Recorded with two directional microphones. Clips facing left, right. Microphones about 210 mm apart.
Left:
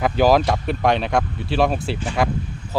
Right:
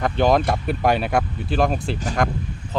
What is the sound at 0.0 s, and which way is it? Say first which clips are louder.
Speech: left 2 dB; 5° left (ahead or behind).